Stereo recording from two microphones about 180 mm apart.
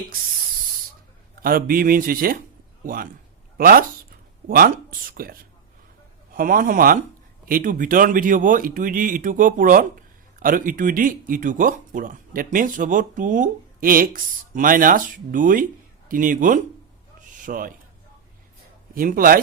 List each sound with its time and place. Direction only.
1.4 s speech: 55° right (ahead or behind)
17.3 s a sound: 50° right (ahead or behind)
18.9 s speech: 50° right (ahead or behind)